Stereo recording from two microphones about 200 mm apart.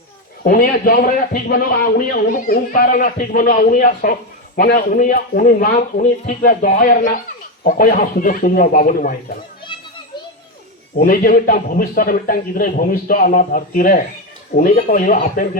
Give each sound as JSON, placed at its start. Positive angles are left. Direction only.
{"t": 0.4, "sound": "a man's voice", "side_deg": 45}
{"t": 10.9, "sound": "a man's voice", "side_deg": 45}